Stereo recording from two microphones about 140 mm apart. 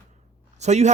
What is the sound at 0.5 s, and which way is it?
Speech, 55° right (ahead or behind).